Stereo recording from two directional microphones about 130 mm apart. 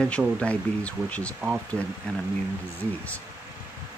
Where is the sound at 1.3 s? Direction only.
5° right (ahead or behind).